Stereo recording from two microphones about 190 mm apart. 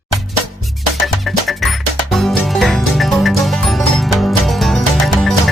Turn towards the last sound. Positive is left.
turn(degrees=0)  # may be behind; listen again after turning